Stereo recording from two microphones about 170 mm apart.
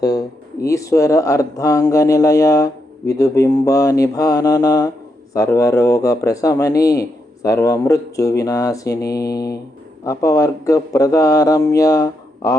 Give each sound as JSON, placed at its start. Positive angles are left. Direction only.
{"t": 0.0, "sound": "speech", "side_deg": 20}